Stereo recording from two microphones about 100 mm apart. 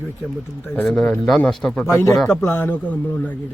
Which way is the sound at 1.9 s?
30° left (ahead or behind).